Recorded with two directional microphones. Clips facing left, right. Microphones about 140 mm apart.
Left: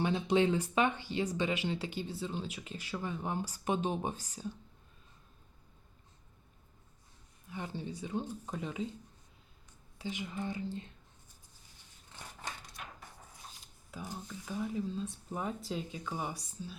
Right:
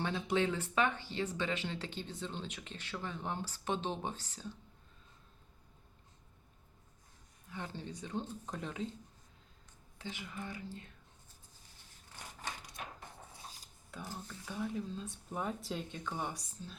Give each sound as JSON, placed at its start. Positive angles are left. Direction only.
{"t": 0.0, "sound": "speech", "side_deg": 20}
{"t": 7.5, "sound": "speech", "side_deg": 10}
{"t": 10.0, "sound": "speech", "side_deg": 15}
{"t": 14.1, "sound": "speech", "side_deg": 10}